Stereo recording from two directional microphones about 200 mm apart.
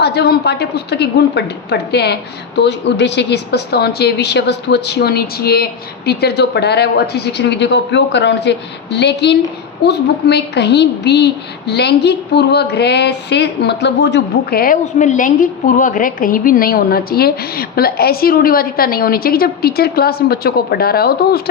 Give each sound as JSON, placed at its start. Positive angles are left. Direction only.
{"t": 0.0, "sound": "a woman's voice", "side_deg": 55}